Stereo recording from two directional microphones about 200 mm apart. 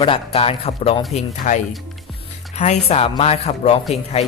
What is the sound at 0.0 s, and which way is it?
Speech, 30° left (ahead or behind).